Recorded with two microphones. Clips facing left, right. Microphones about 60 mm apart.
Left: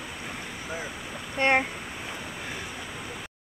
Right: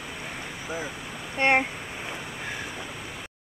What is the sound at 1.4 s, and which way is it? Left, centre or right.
Speech, right.